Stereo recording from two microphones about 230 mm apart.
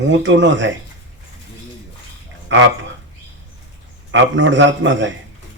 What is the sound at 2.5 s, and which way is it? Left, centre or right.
Speech, right.